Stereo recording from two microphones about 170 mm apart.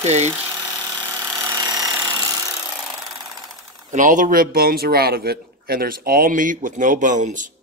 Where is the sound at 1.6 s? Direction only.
25° right (ahead or behind).